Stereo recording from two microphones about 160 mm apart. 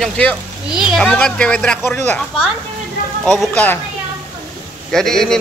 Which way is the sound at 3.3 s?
5° left (ahead or behind).